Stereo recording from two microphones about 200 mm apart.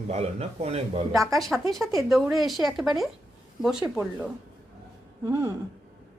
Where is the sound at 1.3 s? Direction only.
Centre (ahead or behind).